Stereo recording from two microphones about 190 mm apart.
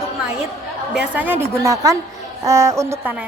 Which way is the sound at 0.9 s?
10° right (ahead or behind).